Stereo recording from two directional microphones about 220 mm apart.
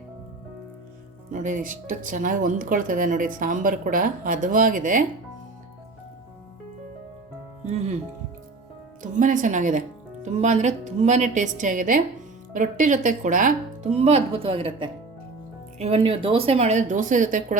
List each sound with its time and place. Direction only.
1.3 s speech: 35° right (ahead or behind)
7.7 s music: 30° right (ahead or behind)
9.0 s speech: 35° right (ahead or behind)